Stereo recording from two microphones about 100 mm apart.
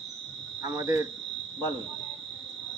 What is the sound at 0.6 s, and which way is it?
Speech, 40° right (ahead or behind).